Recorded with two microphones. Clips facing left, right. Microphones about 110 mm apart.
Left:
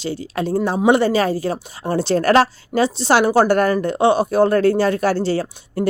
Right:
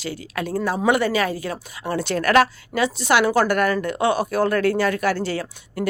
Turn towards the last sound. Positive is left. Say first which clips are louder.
# left 5 dB
turn(degrees=30)  # may be behind; listen again after turning